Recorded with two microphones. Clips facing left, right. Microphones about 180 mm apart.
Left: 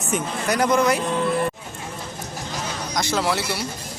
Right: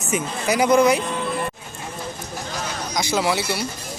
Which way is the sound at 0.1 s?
5° right (ahead or behind).